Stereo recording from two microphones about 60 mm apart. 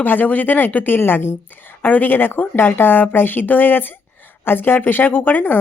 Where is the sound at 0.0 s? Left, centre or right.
Left.